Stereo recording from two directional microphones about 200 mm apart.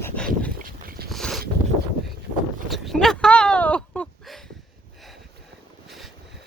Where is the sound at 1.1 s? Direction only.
Centre (ahead or behind).